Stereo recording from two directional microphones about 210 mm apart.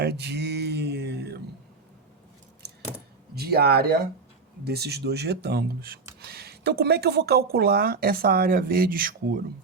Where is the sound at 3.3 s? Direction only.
50° right (ahead or behind).